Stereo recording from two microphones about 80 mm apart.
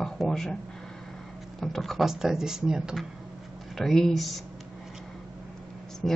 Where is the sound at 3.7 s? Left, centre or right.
Centre.